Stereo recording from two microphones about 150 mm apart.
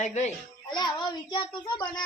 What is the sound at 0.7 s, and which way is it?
A child's voice, 30° left (ahead or behind).